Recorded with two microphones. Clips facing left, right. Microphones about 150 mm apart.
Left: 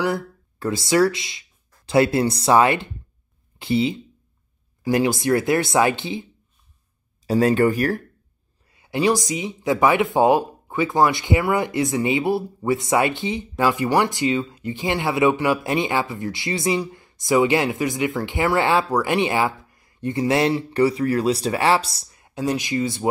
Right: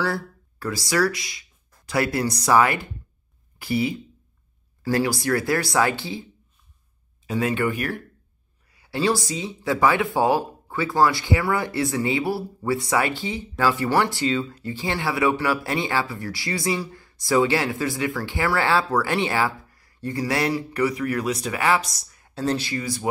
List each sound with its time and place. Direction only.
0.0 s speech: 20° left (ahead or behind)
7.2 s speech: 40° left (ahead or behind)
8.7 s speech: 20° left (ahead or behind)